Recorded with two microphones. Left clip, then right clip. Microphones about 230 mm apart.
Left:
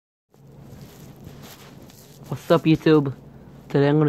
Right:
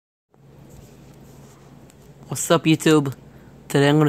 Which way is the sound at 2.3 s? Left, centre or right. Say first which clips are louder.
Even; right.